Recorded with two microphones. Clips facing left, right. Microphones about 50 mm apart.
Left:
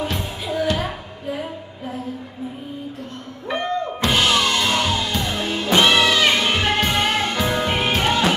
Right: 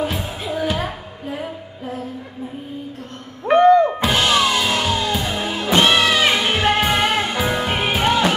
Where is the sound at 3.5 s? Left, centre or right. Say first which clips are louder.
Right 12 dB; right.